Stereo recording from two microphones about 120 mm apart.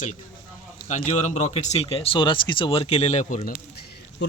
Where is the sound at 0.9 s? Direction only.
80° left.